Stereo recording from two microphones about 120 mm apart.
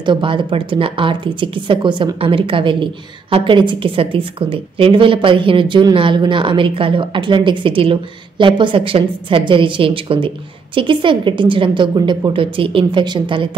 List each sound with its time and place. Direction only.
0.0 s speech: 45° right (ahead or behind)